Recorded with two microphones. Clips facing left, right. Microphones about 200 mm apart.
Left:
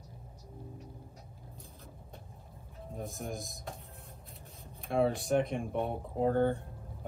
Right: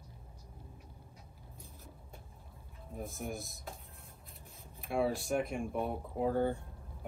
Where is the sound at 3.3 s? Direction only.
15° left (ahead or behind).